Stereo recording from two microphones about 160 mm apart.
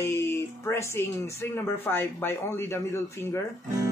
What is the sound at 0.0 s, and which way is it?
Speech, 15° left (ahead or behind).